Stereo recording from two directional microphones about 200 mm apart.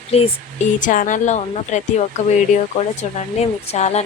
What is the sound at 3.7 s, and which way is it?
Speech, 35° left (ahead or behind).